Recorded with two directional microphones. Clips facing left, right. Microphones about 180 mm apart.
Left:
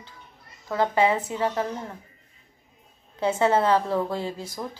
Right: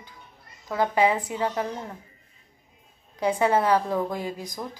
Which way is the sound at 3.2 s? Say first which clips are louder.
Left 1 dB; 15° right (ahead or behind).